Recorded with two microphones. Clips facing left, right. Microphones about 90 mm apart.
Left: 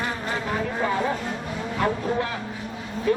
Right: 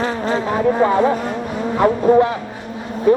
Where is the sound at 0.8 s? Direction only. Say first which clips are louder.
Right 9 dB; 40° right (ahead or behind).